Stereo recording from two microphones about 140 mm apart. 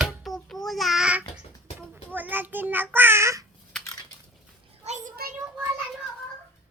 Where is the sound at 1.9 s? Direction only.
15° right (ahead or behind).